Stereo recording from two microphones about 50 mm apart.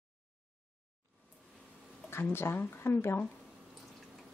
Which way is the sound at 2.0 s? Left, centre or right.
Left.